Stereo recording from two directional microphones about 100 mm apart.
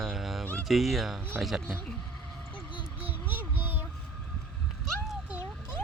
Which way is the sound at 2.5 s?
55° left (ahead or behind).